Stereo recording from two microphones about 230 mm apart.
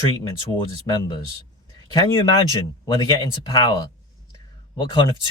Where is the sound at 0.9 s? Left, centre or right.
Centre.